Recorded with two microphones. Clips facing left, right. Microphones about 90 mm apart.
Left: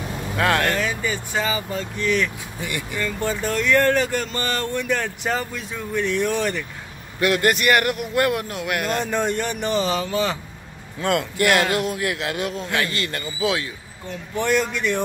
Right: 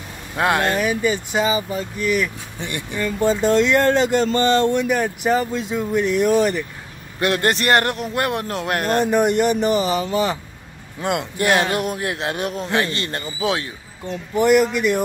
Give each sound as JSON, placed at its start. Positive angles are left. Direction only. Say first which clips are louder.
{"t": 0.4, "sound": "speech", "louder": "right 2 dB", "side_deg": -25}
{"t": 2.6, "sound": "a man's voice", "louder": "right 1 dB", "side_deg": -30}
{"t": 3.0, "sound": "a man's voice", "louder": "right 7 dB", "side_deg": -15}
{"t": 7.2, "sound": "a man's voice", "louder": "even", "side_deg": -25}
{"t": 8.5, "sound": "speech", "louder": "right 3 dB", "side_deg": -40}
{"t": 9.1, "sound": "a man's voice", "louder": "right 6 dB", "side_deg": -15}
{"t": 14.3, "sound": "speech", "louder": "right 6 dB", "side_deg": -15}